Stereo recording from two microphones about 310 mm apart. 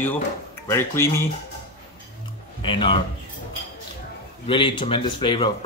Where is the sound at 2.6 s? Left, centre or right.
Centre.